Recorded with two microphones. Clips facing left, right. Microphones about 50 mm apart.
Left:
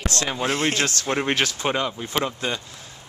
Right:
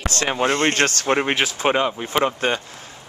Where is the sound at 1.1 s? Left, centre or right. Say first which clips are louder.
Right 3 dB; centre.